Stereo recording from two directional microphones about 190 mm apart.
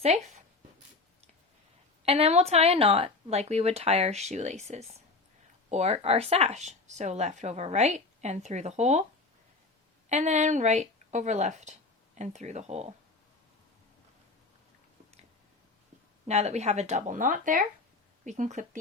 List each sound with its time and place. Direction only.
0.0 s speech: 35° right (ahead or behind)
2.0 s speech: 35° right (ahead or behind)
10.1 s speech: 40° right (ahead or behind)
16.2 s speech: 35° right (ahead or behind)